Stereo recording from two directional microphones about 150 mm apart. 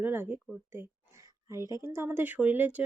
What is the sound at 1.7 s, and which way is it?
Speech, 15° right (ahead or behind).